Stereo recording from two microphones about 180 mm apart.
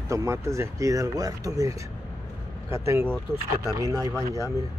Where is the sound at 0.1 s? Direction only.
15° right (ahead or behind).